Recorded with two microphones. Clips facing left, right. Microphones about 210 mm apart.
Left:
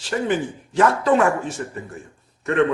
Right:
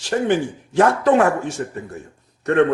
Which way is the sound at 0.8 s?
50° right (ahead or behind).